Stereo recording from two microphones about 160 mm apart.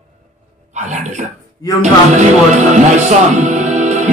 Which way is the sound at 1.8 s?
50° right (ahead or behind).